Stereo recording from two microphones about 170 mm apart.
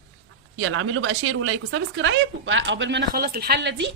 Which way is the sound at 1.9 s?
90° right.